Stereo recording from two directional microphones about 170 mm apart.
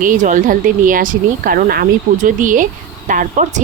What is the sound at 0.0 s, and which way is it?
A woman's voice, 50° right (ahead or behind).